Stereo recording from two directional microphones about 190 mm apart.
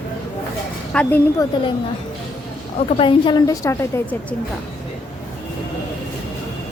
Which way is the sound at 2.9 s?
25° left (ahead or behind).